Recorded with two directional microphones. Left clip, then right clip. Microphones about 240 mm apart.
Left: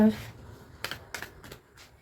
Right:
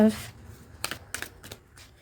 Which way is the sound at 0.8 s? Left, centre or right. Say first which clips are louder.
Right 2 dB; right.